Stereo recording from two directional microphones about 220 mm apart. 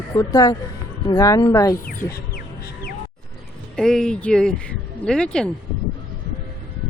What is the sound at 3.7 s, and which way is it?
Speech, 5° left (ahead or behind).